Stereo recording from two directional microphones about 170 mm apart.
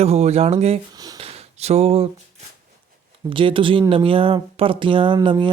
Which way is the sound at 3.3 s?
30° right (ahead or behind).